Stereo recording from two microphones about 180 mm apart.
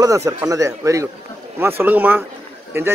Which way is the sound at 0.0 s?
15° right (ahead or behind).